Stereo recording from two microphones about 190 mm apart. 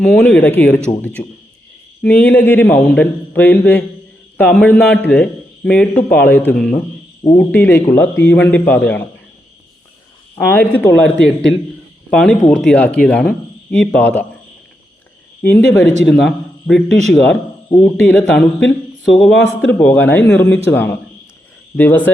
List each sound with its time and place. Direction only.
0.0 s a man's voice: 5° left (ahead or behind)
10.3 s a man's voice: 10° left (ahead or behind)
15.4 s a man's voice: 10° left (ahead or behind)
16.0 s speech: centre (ahead or behind)
17.7 s speech: 20° left (ahead or behind)
18.0 s a man's voice: 5° left (ahead or behind)